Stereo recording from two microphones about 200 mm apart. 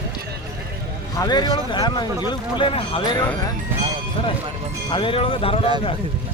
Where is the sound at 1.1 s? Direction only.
20° left (ahead or behind).